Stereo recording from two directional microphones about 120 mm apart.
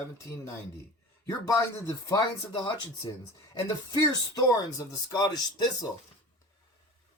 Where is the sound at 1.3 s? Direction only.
25° left (ahead or behind).